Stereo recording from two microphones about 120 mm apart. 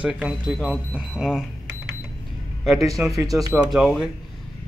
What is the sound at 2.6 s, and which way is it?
Speech, centre (ahead or behind).